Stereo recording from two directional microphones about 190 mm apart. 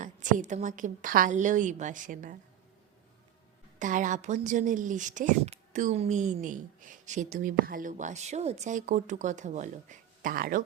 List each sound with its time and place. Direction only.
0.0 s speech: 40° right (ahead or behind)
3.8 s speech: 40° right (ahead or behind)